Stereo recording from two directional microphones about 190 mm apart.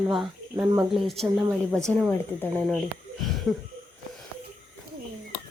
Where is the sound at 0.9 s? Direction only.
Centre (ahead or behind).